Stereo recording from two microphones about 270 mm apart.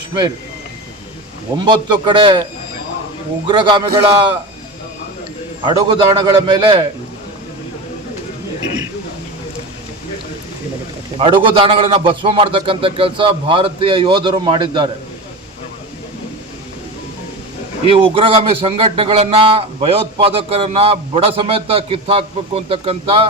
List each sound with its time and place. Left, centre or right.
0.1 s speech: centre
1.5 s a man's voice: centre
5.6 s a man's voice: centre
11.2 s a man's voice: centre
17.8 s a man's voice: centre